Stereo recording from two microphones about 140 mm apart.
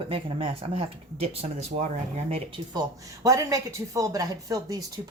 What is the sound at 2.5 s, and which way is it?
Speech, 25° right (ahead or behind).